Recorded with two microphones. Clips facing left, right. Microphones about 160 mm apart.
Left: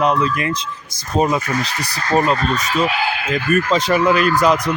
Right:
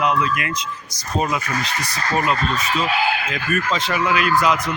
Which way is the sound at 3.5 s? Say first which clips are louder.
Left 6 dB; 40° left (ahead or behind).